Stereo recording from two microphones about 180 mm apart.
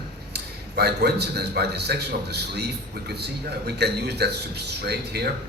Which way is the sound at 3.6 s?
65° right (ahead or behind).